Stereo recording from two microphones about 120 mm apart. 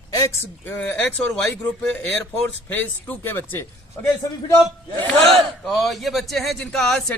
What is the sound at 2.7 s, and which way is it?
Speech, 15° left (ahead or behind).